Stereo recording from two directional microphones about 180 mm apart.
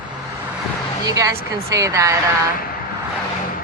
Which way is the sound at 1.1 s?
20° right (ahead or behind).